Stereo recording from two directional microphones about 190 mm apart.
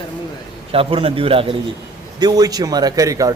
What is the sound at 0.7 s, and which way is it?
A man's voice, 30° right (ahead or behind).